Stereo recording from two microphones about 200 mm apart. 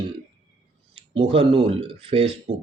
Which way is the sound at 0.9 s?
25° right (ahead or behind).